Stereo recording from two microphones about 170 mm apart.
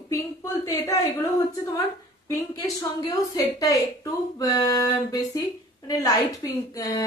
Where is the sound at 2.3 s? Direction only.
20° left (ahead or behind).